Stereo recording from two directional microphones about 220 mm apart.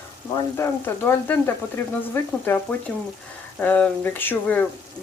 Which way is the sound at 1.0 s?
10° left (ahead or behind).